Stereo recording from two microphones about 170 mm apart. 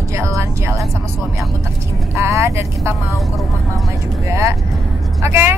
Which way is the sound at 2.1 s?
15° right (ahead or behind).